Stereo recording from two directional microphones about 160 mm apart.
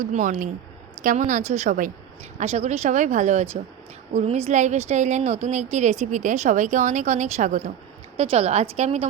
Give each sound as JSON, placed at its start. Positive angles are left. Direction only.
{"t": 0.0, "sound": "speech", "side_deg": -50}
{"t": 8.1, "sound": "a woman's voice", "side_deg": -40}